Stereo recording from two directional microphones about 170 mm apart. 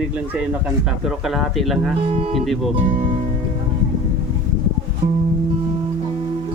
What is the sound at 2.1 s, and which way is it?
Speech, 35° right (ahead or behind).